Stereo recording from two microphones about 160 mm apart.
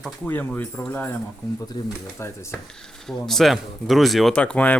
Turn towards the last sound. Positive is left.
turn(degrees=10)  # may be behind; listen again after turning